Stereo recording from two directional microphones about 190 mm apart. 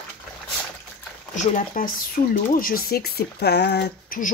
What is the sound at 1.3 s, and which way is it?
Speech, 40° left (ahead or behind).